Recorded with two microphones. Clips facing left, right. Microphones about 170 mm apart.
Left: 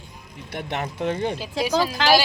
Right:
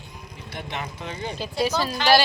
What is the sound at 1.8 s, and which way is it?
Speech, 90° left.